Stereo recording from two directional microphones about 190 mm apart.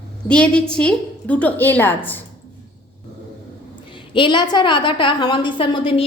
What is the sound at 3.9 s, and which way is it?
A woman's voice, 25° left (ahead or behind).